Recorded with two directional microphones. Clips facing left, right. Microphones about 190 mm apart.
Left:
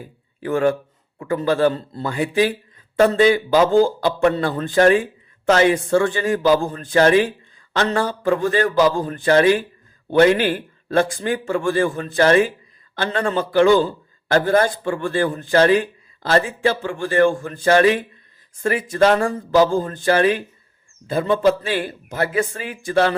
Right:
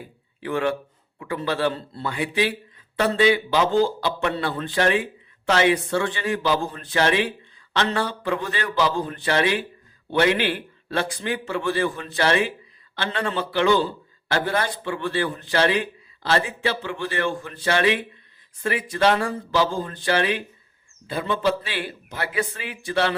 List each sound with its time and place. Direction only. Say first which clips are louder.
0.3 s a man's voice: left 5 dB; 45° left (ahead or behind)